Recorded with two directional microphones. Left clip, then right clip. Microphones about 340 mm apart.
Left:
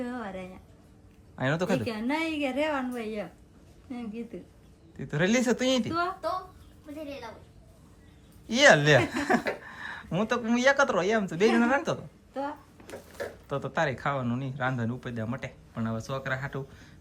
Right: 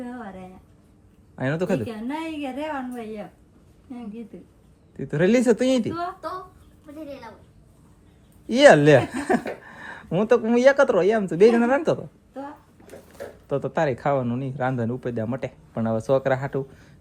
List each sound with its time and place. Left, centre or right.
0.0 s a sound: centre
1.4 s speech: centre
8.4 s speech: centre